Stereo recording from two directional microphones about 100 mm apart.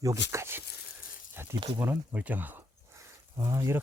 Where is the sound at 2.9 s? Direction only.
30° right (ahead or behind).